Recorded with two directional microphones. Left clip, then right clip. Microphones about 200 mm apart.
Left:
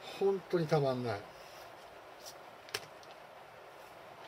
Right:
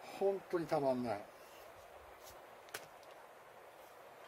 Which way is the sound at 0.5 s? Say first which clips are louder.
Left 4 dB; 30° right (ahead or behind).